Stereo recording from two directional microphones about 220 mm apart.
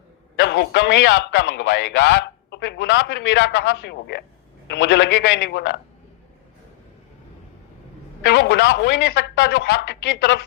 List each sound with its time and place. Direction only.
0.3 s a man's voice: 50° left (ahead or behind)
8.2 s a man's voice: 50° left (ahead or behind)